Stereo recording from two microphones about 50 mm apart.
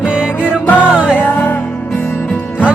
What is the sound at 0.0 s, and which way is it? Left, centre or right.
Music, right.